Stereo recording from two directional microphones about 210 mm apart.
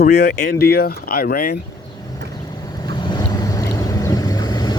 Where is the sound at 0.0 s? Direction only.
45° left (ahead or behind).